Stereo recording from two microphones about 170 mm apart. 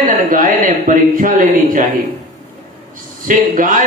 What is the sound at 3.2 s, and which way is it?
Speech, 50° right (ahead or behind).